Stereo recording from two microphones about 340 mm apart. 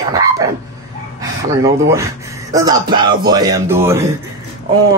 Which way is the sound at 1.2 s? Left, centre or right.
Centre.